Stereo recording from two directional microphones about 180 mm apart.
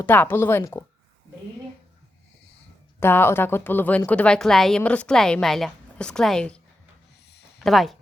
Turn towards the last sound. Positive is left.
turn(degrees=0)  # may be behind; listen again after turning